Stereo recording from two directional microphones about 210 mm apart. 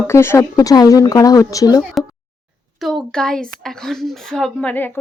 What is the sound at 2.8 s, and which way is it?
A woman's voice, centre (ahead or behind).